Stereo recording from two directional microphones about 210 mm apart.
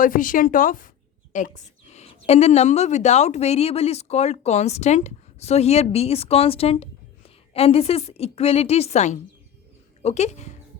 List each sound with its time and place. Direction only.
0.0 s a woman's voice: 40° left (ahead or behind)